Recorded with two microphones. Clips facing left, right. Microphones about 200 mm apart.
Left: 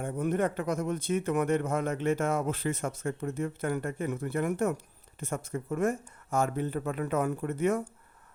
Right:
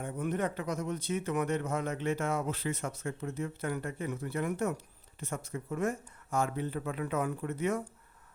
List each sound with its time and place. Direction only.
0.0 s a man's voice: 50° left (ahead or behind)